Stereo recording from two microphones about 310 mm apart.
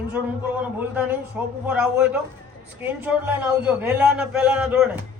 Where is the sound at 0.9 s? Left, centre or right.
Centre.